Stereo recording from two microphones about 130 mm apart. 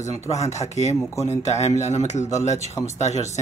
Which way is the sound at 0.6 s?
60° left (ahead or behind).